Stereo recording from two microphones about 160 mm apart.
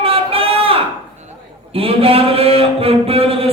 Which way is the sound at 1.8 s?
35° right (ahead or behind).